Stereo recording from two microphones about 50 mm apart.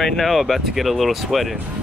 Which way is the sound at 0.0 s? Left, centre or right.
Centre.